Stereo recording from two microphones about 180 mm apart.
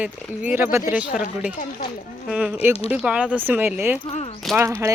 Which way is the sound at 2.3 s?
5° right (ahead or behind).